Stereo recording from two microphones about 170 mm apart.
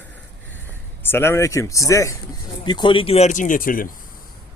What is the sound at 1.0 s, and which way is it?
A man's voice, 15° left (ahead or behind).